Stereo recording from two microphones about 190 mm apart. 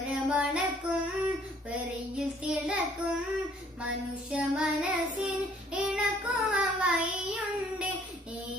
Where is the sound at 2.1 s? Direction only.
5° right (ahead or behind).